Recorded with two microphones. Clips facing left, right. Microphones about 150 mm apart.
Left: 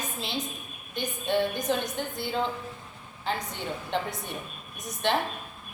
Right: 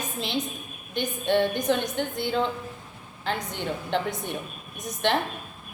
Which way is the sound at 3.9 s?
70° right (ahead or behind).